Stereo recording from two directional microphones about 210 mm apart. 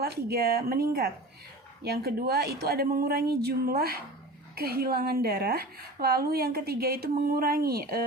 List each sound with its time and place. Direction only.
0.0 s a woman's voice: 50° right (ahead or behind)